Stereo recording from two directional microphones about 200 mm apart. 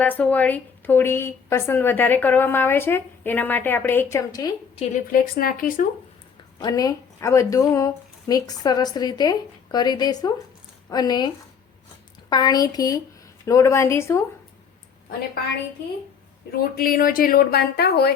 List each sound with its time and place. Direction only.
0.0 s a woman's voice: 10° left (ahead or behind)
4.8 s a woman's voice: 40° left (ahead or behind)
6.6 s a woman's voice: 20° left (ahead or behind)
12.3 s a woman's voice: 20° left (ahead or behind)
16.5 s a woman's voice: 50° left (ahead or behind)